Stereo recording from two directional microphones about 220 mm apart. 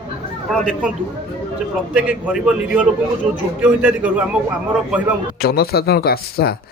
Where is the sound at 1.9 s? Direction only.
5° right (ahead or behind).